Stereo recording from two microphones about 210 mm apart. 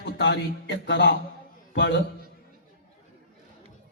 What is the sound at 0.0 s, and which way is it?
A man's voice, 55° left (ahead or behind).